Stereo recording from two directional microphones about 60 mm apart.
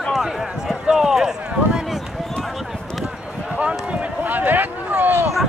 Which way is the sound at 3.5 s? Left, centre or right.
Right.